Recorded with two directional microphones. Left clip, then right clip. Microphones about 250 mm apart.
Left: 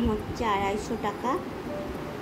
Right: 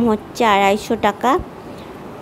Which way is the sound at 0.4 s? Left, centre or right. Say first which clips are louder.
Right 14 dB; right.